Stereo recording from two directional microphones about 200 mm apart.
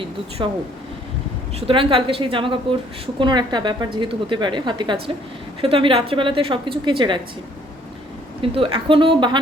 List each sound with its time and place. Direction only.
0.4 s a woman's voice: 20° right (ahead or behind)
8.4 s a woman's voice: 25° right (ahead or behind)